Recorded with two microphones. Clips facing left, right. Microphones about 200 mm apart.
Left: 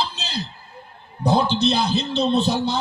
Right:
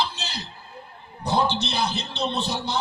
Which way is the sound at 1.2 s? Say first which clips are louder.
Left 6 dB; 60° left (ahead or behind).